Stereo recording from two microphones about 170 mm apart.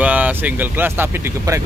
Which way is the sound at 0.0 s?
10° right (ahead or behind).